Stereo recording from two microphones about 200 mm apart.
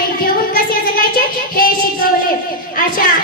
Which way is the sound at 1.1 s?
45° left (ahead or behind).